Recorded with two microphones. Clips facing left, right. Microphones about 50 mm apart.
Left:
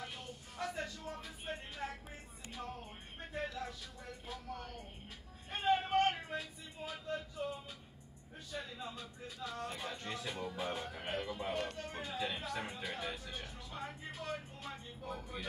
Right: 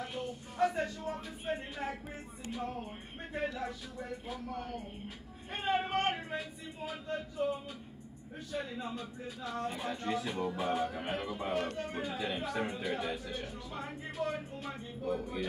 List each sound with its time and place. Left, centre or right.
0.0 s a sound: centre
2.5 s speech: centre
4.3 s speech: centre
8.5 s speech: centre
11.6 s speech: right
11.9 s speech: centre